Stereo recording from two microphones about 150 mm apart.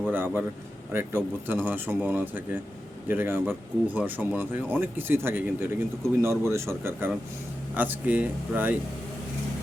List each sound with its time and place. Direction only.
0.1 s speech: 15° right (ahead or behind)